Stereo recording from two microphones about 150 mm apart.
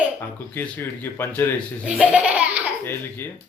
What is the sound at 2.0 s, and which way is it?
Baby laughter, 10° right (ahead or behind).